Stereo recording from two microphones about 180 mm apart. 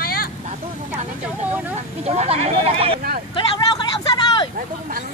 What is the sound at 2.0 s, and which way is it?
Speech, 35° right (ahead or behind).